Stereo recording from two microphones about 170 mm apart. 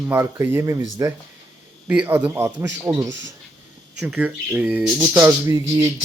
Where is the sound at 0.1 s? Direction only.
15° right (ahead or behind).